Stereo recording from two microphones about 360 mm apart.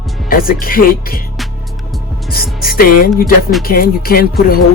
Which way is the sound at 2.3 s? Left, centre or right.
Left.